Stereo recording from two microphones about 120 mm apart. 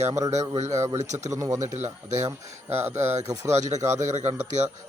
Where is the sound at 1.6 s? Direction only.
75° right (ahead or behind).